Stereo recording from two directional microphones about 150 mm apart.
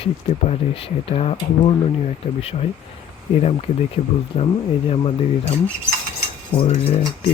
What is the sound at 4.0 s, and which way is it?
Speech, 50° left (ahead or behind).